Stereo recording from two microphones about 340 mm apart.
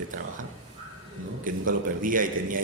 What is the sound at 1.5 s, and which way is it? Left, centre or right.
A man's voice, right.